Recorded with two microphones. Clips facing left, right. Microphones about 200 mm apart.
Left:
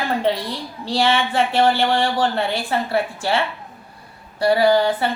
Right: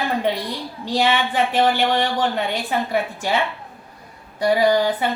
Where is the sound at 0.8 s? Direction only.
15° right (ahead or behind).